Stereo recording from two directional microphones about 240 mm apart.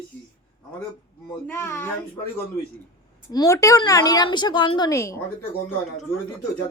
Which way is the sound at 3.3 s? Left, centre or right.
Centre.